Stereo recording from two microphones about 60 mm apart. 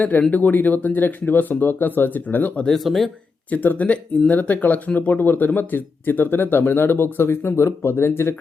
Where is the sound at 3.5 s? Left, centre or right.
Left.